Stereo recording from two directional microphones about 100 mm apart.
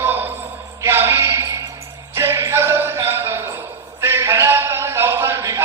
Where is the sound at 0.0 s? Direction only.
20° right (ahead or behind).